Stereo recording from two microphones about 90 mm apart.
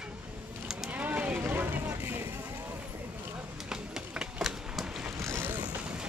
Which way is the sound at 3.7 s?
5° right (ahead or behind).